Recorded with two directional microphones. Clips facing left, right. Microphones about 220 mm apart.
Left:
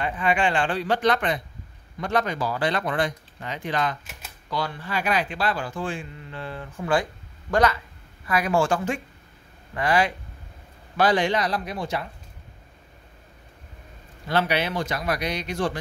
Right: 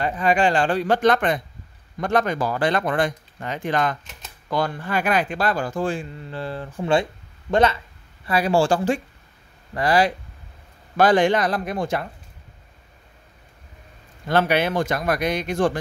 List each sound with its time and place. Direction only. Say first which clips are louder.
0.0 s speech: right 4 dB; 40° right (ahead or behind)
4.0 s typewriter: even; 5° left (ahead or behind)
4.5 s speech: right 5 dB; 50° right (ahead or behind)
11.0 s speech: right 4 dB; 50° right (ahead or behind)
14.2 s speech: right 4 dB; 50° right (ahead or behind)